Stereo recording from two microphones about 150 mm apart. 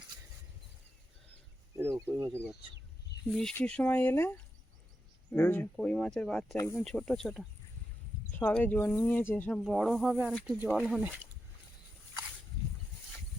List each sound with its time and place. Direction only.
1.7 s a sound: 20° right (ahead or behind)
3.2 s speech: 5° left (ahead or behind)
9.6 s speech: centre (ahead or behind)